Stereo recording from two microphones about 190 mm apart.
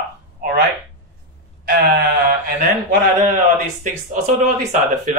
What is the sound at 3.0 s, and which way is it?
Speech, 40° right (ahead or behind).